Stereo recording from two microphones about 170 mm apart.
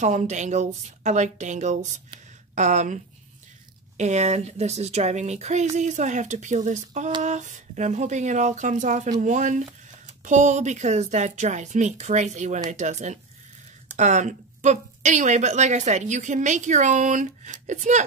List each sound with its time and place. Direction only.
0.0 s a woman's voice: 45° right (ahead or behind)